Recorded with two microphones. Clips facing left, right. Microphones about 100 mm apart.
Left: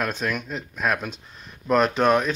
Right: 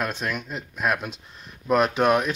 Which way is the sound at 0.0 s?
Centre (ahead or behind).